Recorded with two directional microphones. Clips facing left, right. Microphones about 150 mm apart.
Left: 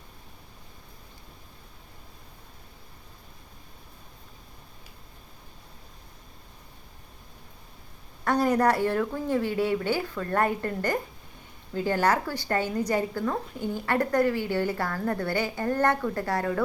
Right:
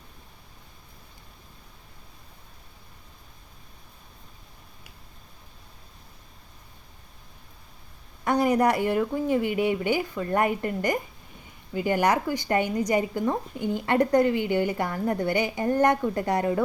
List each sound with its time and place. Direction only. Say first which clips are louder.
8.2 s speech: right 1 dB; 10° right (ahead or behind)